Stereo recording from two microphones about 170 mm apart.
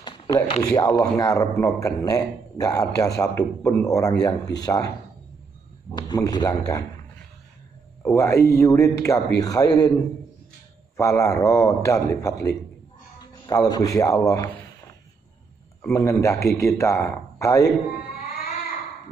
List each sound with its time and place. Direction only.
0.0 s a sound: 30° left (ahead or behind)
0.7 s a man's voice: 20° left (ahead or behind)
5.9 s a man's voice: 25° left (ahead or behind)
8.0 s a man's voice: 15° left (ahead or behind)
11.0 s a man's voice: 20° left (ahead or behind)
13.2 s a sound: 20° left (ahead or behind)
15.9 s a man's voice: 15° left (ahead or behind)